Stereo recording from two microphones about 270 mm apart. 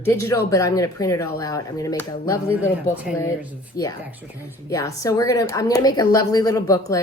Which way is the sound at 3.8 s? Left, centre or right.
Left.